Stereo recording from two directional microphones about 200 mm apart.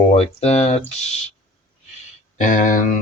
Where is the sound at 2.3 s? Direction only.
40° left (ahead or behind).